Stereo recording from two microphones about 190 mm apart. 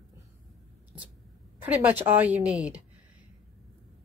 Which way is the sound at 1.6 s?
10° right (ahead or behind).